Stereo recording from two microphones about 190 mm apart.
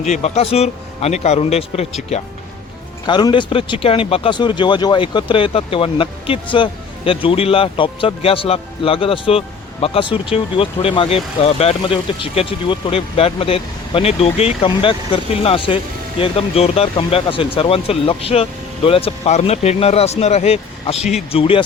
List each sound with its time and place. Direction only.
0.0 s speech: 35° left (ahead or behind)
3.1 s speech: 25° left (ahead or behind)